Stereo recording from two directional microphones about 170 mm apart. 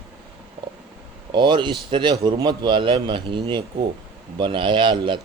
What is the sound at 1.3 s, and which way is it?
Speech, 25° right (ahead or behind).